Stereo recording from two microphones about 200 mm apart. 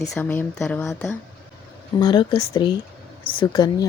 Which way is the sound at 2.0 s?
20° left (ahead or behind).